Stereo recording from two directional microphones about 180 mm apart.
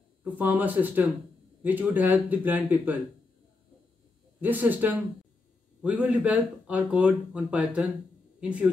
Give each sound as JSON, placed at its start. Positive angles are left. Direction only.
{"t": 0.2, "sound": "speech", "side_deg": -10}
{"t": 4.4, "sound": "speech", "side_deg": -10}